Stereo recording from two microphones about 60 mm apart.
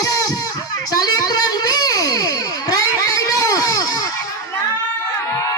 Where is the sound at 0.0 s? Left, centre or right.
Left.